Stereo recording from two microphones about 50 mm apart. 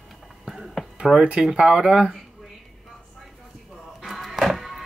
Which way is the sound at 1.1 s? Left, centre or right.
Centre.